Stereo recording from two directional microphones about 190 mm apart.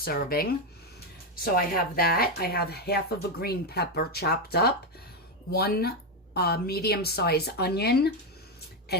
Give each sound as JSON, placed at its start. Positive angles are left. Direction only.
{"t": 0.0, "sound": "speech", "side_deg": 50}
{"t": 1.5, "sound": "speech", "side_deg": 50}